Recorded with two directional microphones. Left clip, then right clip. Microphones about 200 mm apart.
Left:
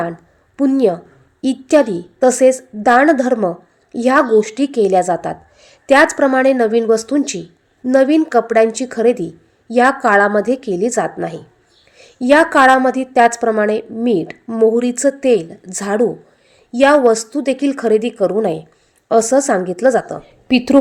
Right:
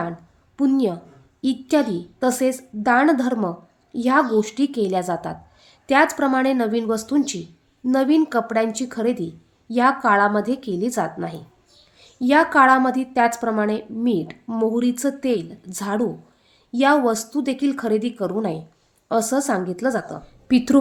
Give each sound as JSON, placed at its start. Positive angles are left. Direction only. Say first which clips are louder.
{"t": 0.5, "sound": "a woman's voice", "louder": "left 7 dB", "side_deg": 10}